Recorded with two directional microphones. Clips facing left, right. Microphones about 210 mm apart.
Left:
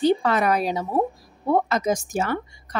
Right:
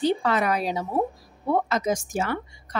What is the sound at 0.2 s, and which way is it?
Speech, 40° left (ahead or behind).